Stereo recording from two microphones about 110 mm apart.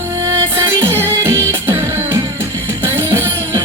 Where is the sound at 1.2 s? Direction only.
25° right (ahead or behind).